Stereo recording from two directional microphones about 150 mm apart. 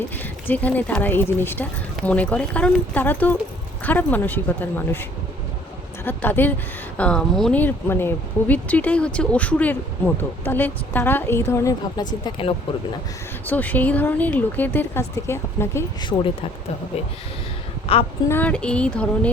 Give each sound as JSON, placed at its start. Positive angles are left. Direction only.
{"t": 0.2, "sound": "speech", "side_deg": 10}
{"t": 6.1, "sound": "speech", "side_deg": 15}
{"t": 13.4, "sound": "speech", "side_deg": 10}
{"t": 16.0, "sound": "speech", "side_deg": 30}
{"t": 17.9, "sound": "speech", "side_deg": 40}
{"t": 18.3, "sound": "speech", "side_deg": 10}